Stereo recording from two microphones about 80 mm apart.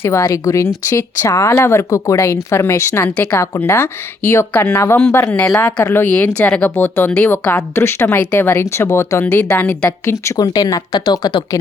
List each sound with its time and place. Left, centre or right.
0.0 s speech: left; by 5.8 s centre
5.8 s speech: left
6.1 s speech: centre; by 9.2 s left
9.2 s speech: centre
10.3 s speech: left
11.0 s speech: left